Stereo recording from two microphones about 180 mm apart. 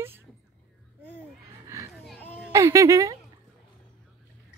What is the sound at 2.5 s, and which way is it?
Speech, 15° right (ahead or behind).